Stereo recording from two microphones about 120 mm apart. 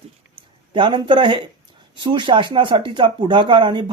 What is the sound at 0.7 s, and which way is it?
Speech, 40° right (ahead or behind).